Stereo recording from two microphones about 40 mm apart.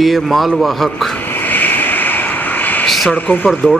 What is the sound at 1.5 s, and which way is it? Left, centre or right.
Vehicle, left.